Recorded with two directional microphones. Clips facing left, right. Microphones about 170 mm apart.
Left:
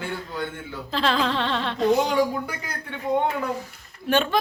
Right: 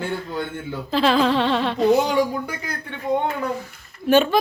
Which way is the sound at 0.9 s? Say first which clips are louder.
Right 5 dB; 10° right (ahead or behind).